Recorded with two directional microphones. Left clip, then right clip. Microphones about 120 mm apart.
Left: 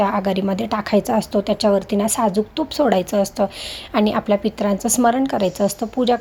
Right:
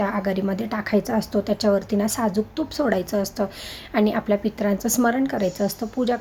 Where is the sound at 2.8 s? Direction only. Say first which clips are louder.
Left 6 dB; 20° left (ahead or behind).